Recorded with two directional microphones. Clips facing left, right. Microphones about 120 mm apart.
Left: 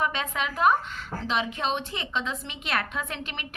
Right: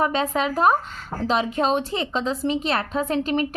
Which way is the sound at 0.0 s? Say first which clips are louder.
Right 7 dB; 35° right (ahead or behind).